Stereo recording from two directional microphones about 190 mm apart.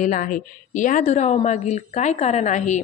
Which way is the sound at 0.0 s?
45° left (ahead or behind).